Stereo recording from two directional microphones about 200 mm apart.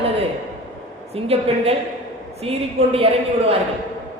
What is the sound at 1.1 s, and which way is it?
Speech, 30° right (ahead or behind).